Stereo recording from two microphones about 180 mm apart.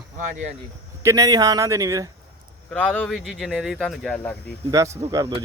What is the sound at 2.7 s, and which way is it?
Speech, 5° left (ahead or behind).